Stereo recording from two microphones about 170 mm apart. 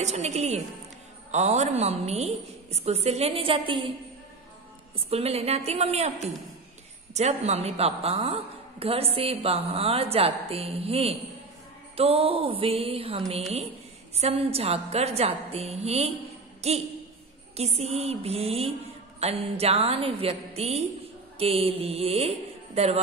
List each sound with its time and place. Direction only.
0.0 s a woman's voice: 40° right (ahead or behind)
4.9 s a woman's voice: 35° right (ahead or behind)
7.2 s a woman's voice: 40° right (ahead or behind)